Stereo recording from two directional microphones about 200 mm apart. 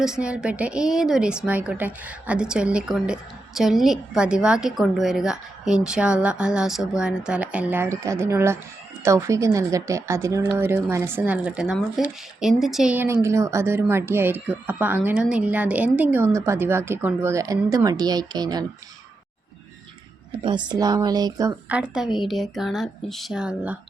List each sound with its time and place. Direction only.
0.0 s a woman's voice: 5° right (ahead or behind); by 18.6 s 20° right (ahead or behind)
20.7 s speech: 20° right (ahead or behind)
21.7 s a woman's voice: 5° right (ahead or behind)